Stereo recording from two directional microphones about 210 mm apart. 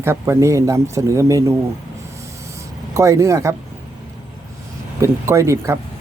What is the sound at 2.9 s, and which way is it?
Speech, 15° right (ahead or behind).